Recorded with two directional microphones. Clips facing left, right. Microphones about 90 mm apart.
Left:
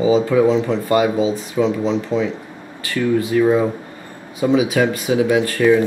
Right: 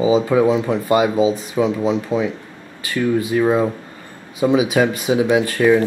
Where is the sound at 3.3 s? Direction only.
20° right (ahead or behind).